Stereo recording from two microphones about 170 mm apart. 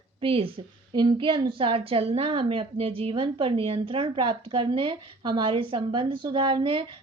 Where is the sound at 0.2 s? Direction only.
30° right (ahead or behind).